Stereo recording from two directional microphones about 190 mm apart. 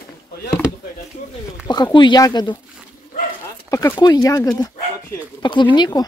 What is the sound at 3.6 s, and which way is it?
Speech, 15° left (ahead or behind).